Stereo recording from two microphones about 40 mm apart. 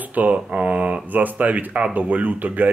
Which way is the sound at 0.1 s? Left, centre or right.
Right.